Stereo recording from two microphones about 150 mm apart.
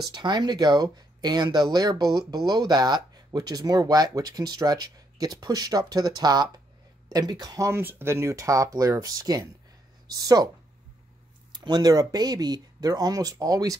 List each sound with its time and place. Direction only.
0.1 s speech: 30° right (ahead or behind)
11.6 s speech: 25° right (ahead or behind)